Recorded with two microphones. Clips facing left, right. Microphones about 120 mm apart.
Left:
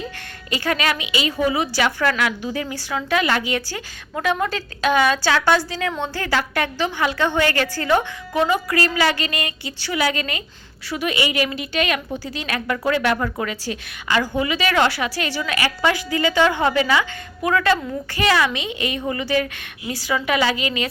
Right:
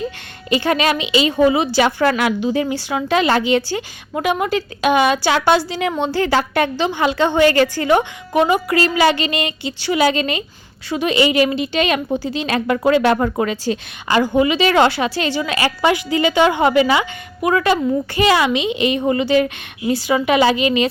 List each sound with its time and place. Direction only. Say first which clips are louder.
0.5 s a woman's voice: right 5 dB; 20° right (ahead or behind)